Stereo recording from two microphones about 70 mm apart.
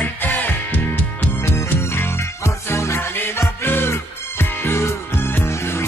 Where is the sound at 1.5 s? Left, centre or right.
Left.